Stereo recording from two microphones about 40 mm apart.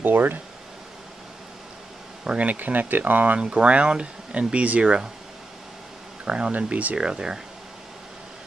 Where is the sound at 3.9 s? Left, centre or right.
Right.